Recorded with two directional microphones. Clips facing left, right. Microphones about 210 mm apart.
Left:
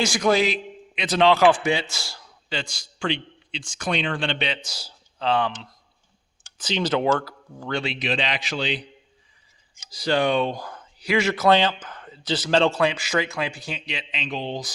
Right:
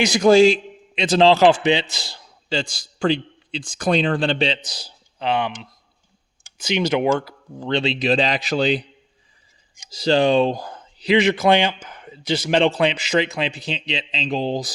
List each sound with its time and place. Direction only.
0.0 s a man's voice: 25° right (ahead or behind)
6.6 s speech: 10° right (ahead or behind); by 8.8 s 40° right (ahead or behind)
9.7 s speech: 25° right (ahead or behind)